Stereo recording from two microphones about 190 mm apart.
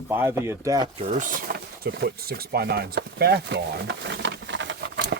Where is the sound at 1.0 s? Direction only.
40° right (ahead or behind).